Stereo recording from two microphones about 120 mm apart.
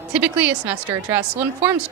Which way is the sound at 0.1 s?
15° right (ahead or behind).